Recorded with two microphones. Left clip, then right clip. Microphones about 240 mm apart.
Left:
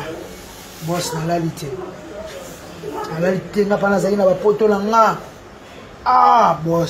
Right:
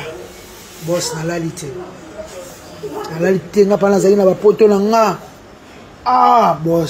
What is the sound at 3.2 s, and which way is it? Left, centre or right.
A man's voice, right.